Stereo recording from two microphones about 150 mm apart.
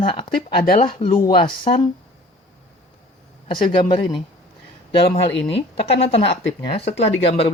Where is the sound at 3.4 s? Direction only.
35° left (ahead or behind).